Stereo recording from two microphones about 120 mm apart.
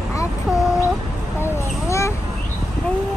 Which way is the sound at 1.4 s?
25° left (ahead or behind).